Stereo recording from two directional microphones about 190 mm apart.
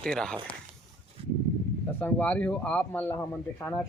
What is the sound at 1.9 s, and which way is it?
A man's voice, 10° left (ahead or behind).